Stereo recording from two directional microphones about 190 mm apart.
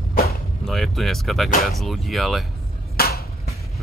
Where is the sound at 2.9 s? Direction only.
50° left (ahead or behind).